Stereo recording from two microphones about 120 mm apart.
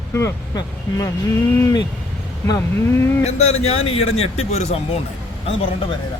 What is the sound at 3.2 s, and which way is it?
A man's voice, 65° left (ahead or behind).